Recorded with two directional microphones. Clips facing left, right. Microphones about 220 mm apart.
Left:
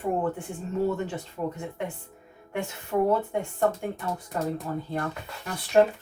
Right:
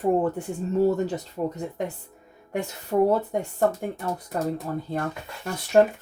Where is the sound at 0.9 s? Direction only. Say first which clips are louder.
Right 5 dB; 40° right (ahead or behind).